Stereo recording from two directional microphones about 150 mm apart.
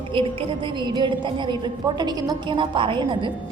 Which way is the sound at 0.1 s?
35° right (ahead or behind).